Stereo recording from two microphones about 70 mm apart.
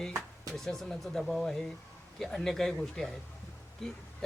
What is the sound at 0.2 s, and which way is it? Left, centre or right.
Speech, centre.